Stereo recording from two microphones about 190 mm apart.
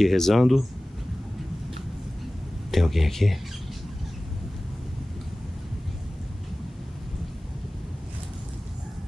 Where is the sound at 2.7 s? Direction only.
Centre (ahead or behind).